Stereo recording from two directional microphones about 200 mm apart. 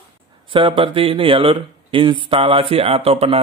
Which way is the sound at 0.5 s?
25° right (ahead or behind).